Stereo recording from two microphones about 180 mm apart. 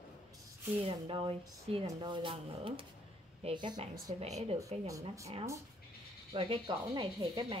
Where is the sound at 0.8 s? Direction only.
30° right (ahead or behind).